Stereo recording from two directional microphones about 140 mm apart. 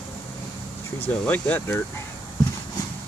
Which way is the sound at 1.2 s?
10° left (ahead or behind).